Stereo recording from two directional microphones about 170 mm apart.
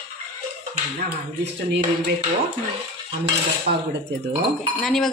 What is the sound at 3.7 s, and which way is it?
Speech, 50° right (ahead or behind).